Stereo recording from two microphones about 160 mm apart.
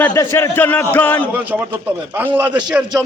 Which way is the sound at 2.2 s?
10° right (ahead or behind).